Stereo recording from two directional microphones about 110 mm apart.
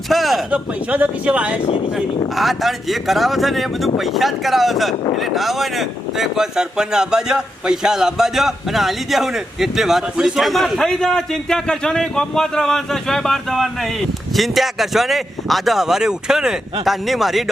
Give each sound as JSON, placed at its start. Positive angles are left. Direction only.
{"t": 0.1, "sound": "speech", "side_deg": 0}
{"t": 0.9, "sound": "speech", "side_deg": -10}
{"t": 1.6, "sound": "speech", "side_deg": 60}
{"t": 2.3, "sound": "speech", "side_deg": 0}